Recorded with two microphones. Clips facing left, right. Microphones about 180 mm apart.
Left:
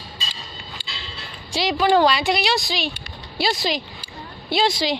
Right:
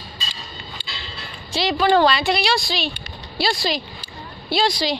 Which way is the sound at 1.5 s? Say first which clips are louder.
Even; 15° left (ahead or behind).